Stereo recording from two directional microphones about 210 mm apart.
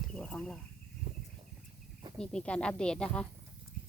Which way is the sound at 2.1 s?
5° left (ahead or behind).